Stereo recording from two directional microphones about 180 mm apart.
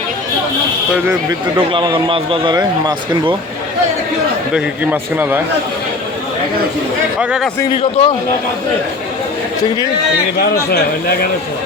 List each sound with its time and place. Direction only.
1.7 s a man's voice: 25° right (ahead or behind)
4.5 s a man's voice: 10° right (ahead or behind)
7.2 s a man's voice: 5° right (ahead or behind)
7.8 s a man's voice: 35° left (ahead or behind)